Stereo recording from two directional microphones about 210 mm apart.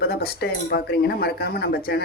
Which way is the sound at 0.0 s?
50° left (ahead or behind).